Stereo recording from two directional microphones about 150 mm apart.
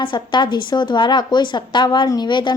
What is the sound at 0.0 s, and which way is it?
A woman's voice, 30° left (ahead or behind).